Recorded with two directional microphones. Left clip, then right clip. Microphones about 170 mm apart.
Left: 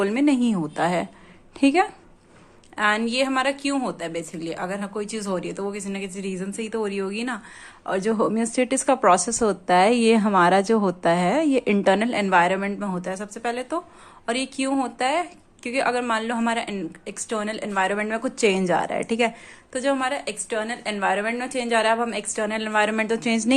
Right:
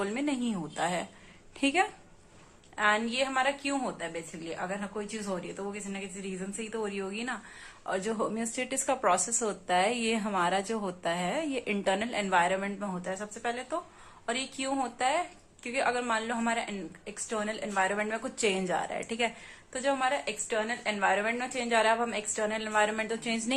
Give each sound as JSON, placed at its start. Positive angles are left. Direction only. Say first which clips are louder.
{"t": 0.0, "sound": "a woman's voice", "louder": "left 11 dB", "side_deg": 40}